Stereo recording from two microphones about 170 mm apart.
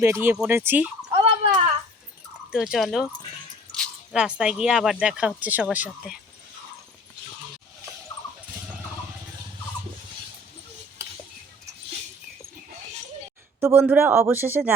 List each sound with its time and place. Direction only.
0.0 s a man's voice: 15° right (ahead or behind)
1.1 s a sound: 35° right (ahead or behind)
2.5 s speech: 5° right (ahead or behind)
4.1 s a man's voice: 5° right (ahead or behind)
13.6 s a man's voice: 15° right (ahead or behind)